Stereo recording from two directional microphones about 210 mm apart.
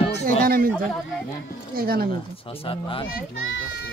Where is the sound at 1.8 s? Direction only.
45° right (ahead or behind).